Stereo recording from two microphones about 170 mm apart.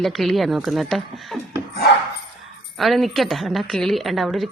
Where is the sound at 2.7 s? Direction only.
Centre (ahead or behind).